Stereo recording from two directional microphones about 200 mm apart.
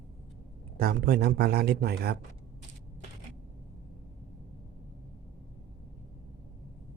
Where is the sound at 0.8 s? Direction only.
50° right (ahead or behind).